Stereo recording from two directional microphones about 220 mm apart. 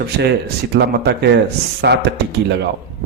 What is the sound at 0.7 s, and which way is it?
Speech, 50° right (ahead or behind).